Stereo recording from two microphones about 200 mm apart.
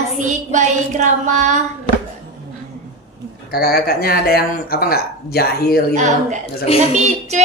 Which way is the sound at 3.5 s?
50° left (ahead or behind).